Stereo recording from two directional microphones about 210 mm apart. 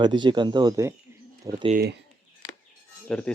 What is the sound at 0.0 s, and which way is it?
Speech, 20° right (ahead or behind).